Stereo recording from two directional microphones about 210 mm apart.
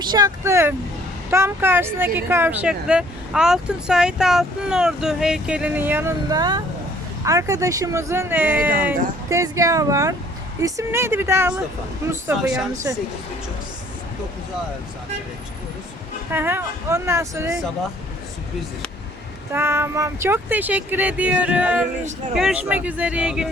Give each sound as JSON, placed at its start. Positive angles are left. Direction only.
{"t": 0.0, "sound": "speech", "side_deg": -20}
{"t": 16.3, "sound": "speech", "side_deg": -10}
{"t": 19.5, "sound": "speech", "side_deg": -10}